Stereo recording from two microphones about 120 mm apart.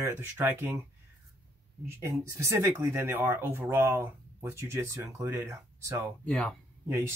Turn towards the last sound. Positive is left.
turn(degrees=-20)  # may be behind; listen again after turning